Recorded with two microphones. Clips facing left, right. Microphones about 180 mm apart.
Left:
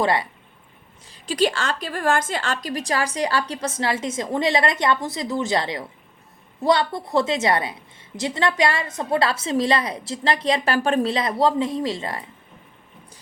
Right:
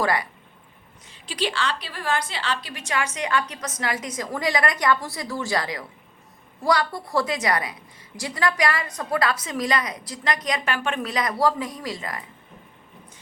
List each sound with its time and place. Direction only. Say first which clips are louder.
0.0 s a woman's voice: left 3 dB; 25° left (ahead or behind)
1.0 s a woman's voice: left 7 dB; 40° left (ahead or behind)